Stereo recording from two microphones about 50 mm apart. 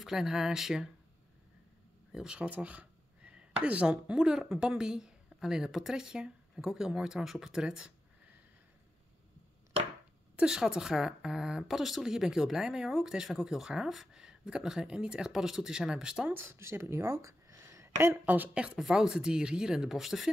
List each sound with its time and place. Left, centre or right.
0.0 s speech: centre
2.1 s speech: centre
10.4 s speech: centre
16.3 s speech: right
18.2 s a woman's voice: right
18.5 s speech: right
18.8 s speech: centre